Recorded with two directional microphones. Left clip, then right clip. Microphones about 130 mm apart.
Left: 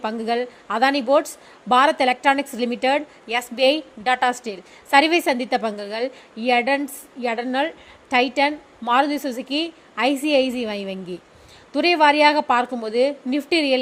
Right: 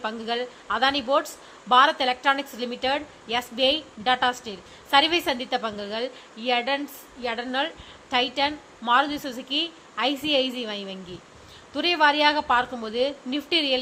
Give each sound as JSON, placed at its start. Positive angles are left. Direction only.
{"t": 0.0, "sound": "a woman's voice", "side_deg": 50}